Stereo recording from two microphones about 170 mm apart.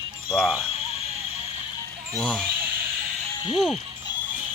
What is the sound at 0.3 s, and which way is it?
Music, 5° right (ahead or behind).